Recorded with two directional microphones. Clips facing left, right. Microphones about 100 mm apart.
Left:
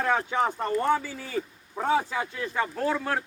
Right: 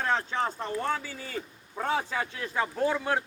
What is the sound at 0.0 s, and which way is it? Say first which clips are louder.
A man's voice: left 3 dB; 10° left (ahead or behind).